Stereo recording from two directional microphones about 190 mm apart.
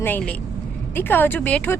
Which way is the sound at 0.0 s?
10° left (ahead or behind).